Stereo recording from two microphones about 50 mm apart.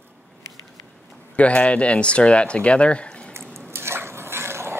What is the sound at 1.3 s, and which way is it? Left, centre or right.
Speech, left.